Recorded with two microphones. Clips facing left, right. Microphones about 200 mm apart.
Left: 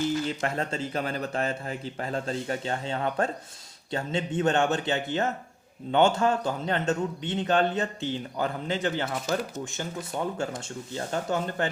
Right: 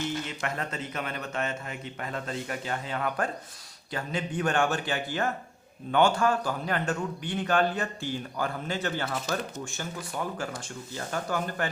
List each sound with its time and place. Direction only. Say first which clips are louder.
0.3 s a man's voice: left 4 dB; 30° left (ahead or behind)